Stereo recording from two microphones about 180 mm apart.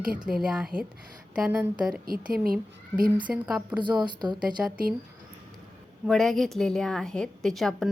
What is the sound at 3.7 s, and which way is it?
Speech, 25° right (ahead or behind).